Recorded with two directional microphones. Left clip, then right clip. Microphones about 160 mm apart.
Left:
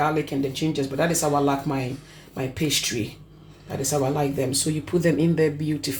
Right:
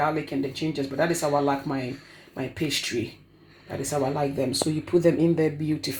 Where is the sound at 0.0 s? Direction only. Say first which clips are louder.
Left 2 dB; 50° right (ahead or behind).